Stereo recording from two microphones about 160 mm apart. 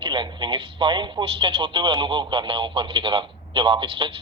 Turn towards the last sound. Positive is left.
turn(degrees=-30)  # may be behind; listen again after turning